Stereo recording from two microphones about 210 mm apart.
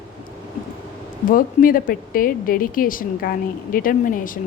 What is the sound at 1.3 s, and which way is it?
A woman's voice, 40° left (ahead or behind).